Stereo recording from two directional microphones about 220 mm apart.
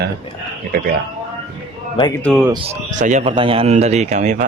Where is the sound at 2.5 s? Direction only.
25° right (ahead or behind).